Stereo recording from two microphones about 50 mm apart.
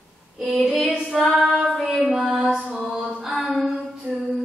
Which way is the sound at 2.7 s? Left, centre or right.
Centre.